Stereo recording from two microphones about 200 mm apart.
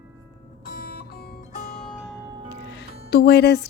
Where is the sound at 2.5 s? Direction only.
60° left (ahead or behind).